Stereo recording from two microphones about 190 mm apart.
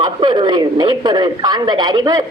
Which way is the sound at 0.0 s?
25° right (ahead or behind).